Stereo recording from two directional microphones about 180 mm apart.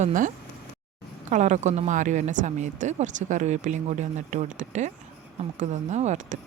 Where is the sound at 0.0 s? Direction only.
45° right (ahead or behind).